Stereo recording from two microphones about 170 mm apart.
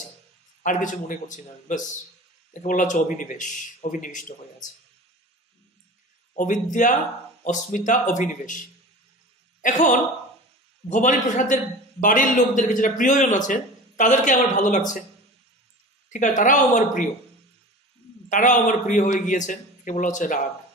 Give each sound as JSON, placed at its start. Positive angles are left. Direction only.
{"t": 0.6, "sound": "a man's voice", "side_deg": 50}
{"t": 6.3, "sound": "a man's voice", "side_deg": 50}
{"t": 9.6, "sound": "a man's voice", "side_deg": 50}
{"t": 16.1, "sound": "a man's voice", "side_deg": 50}
{"t": 18.3, "sound": "a man's voice", "side_deg": 50}